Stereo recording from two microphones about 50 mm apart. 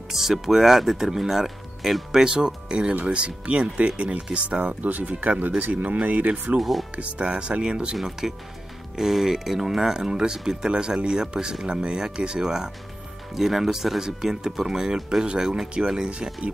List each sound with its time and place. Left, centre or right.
0.1 s speech: centre
2.2 s speech: centre
6.6 s speech: centre
7.0 s speech: right